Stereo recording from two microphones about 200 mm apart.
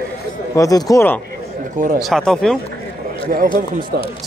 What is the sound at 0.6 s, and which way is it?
Speech, 15° left (ahead or behind).